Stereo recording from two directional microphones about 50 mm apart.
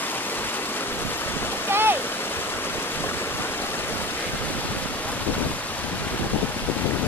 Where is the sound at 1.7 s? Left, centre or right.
Right.